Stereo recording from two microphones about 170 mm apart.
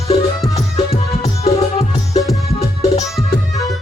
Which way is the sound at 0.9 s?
35° left (ahead or behind).